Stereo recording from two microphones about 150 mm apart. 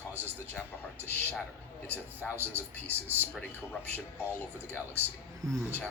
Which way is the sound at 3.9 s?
10° left (ahead or behind).